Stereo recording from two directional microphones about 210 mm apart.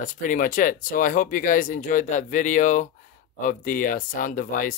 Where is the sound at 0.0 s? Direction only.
40° left (ahead or behind).